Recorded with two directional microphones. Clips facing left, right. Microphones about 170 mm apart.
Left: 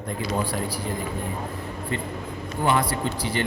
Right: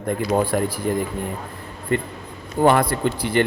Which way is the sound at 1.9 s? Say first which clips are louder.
Right 8 dB; 55° right (ahead or behind).